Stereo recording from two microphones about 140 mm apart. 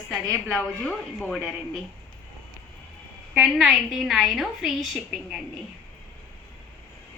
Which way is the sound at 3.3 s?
Centre (ahead or behind).